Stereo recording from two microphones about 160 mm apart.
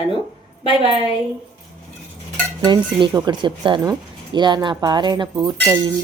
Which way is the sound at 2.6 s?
30° right (ahead or behind).